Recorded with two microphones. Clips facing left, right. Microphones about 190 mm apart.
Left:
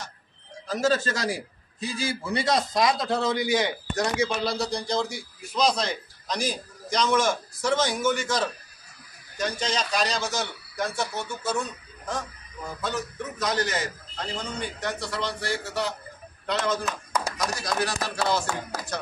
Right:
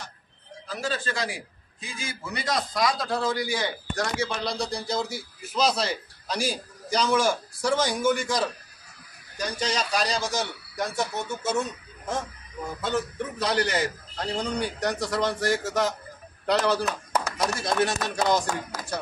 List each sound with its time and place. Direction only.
0.7 s a man's voice: 45° left (ahead or behind); by 4.3 s 20° left (ahead or behind)
4.5 s a man's voice: centre (ahead or behind); by 16.9 s 35° right (ahead or behind)
17.4 s a man's voice: 25° right (ahead or behind)